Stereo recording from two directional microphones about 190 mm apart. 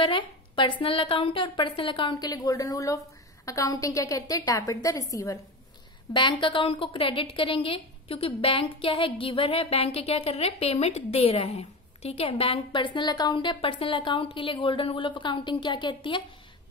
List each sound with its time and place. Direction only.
0.0 s a woman's voice: 25° left (ahead or behind)